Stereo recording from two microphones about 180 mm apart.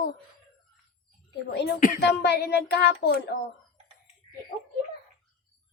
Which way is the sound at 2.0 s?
65° left (ahead or behind).